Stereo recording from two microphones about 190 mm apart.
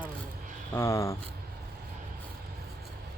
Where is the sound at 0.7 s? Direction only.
15° left (ahead or behind).